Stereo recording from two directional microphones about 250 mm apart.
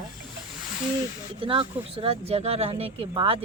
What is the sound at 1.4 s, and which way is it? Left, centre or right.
Speech, right.